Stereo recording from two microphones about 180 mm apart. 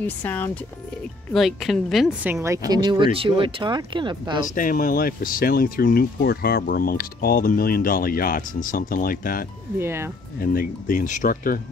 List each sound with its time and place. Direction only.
0.0 s a woman's voice: 10° left (ahead or behind)
2.4 s speech: 20° right (ahead or behind)
4.6 s speech: 50° left (ahead or behind)
9.8 s speech: 15° right (ahead or behind)
10.4 s speech: 55° left (ahead or behind)